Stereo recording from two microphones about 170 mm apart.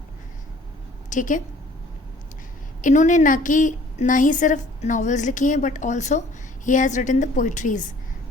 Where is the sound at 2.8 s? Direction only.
45° left (ahead or behind).